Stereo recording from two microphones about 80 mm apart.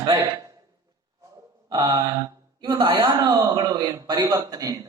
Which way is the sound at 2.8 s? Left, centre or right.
Right.